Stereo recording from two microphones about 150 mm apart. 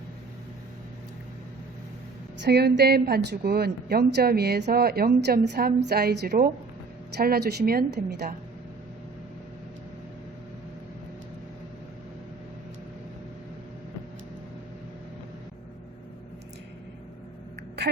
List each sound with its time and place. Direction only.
2.5 s a woman's voice: 90° right